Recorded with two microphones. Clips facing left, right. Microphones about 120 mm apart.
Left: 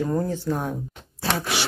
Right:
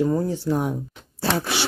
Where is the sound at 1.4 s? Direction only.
30° right (ahead or behind).